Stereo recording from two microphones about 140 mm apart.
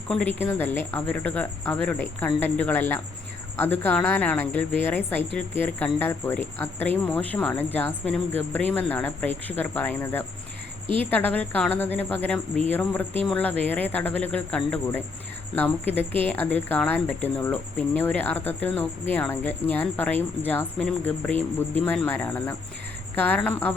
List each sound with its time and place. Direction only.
0.1 s a woman's voice: 10° left (ahead or behind)
10.8 s speech: 40° right (ahead or behind)
11.1 s a woman's voice: 10° left (ahead or behind)